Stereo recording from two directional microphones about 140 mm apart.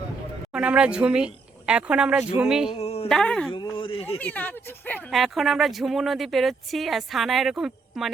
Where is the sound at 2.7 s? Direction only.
50° left (ahead or behind).